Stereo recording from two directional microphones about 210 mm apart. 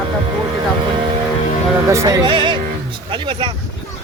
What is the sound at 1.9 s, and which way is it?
Speech, 15° right (ahead or behind).